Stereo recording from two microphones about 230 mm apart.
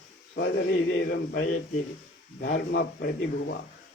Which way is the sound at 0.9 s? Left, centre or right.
Left.